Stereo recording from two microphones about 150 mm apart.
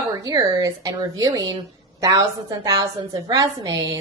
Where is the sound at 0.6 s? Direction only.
20° right (ahead or behind).